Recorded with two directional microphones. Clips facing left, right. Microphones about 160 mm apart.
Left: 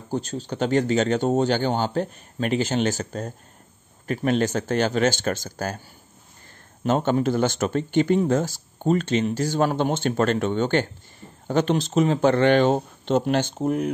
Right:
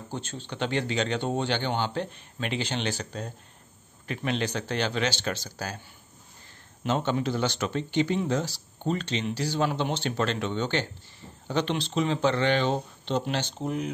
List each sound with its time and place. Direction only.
0.1 s speech: 40° left (ahead or behind)
6.8 s speech: 50° left (ahead or behind)